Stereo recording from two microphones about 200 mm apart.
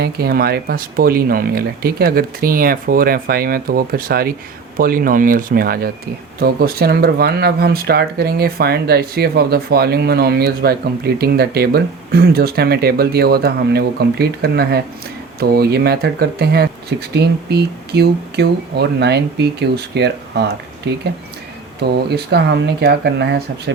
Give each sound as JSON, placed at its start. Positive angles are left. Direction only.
{"t": 0.0, "sound": "speech", "side_deg": -50}